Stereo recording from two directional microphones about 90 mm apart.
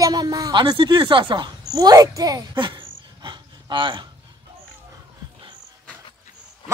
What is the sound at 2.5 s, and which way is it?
Dog, 60° right (ahead or behind).